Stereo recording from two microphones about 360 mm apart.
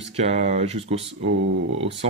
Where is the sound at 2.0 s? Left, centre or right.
Centre.